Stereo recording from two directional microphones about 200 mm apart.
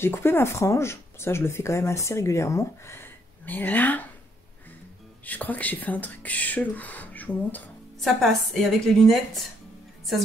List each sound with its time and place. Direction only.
0.0 s speech: 10° left (ahead or behind)
5.2 s speech: 10° left (ahead or behind)